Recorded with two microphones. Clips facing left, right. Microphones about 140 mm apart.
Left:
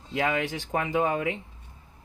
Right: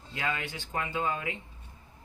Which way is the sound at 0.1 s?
85° left.